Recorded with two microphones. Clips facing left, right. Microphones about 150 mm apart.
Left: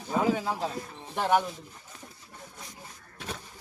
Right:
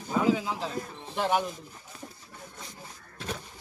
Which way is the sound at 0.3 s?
45° left (ahead or behind).